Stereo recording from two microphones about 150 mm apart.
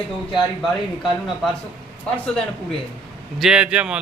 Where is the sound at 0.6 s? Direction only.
Centre (ahead or behind).